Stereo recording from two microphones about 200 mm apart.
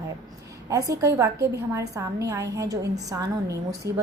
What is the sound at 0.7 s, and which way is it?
A woman's voice, 15° right (ahead or behind).